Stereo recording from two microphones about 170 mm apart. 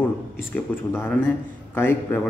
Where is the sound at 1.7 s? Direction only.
15° left (ahead or behind).